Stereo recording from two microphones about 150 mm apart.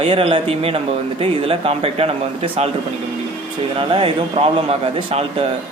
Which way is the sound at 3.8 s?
35° right (ahead or behind).